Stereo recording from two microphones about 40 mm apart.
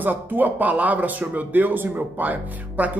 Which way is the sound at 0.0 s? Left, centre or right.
Right.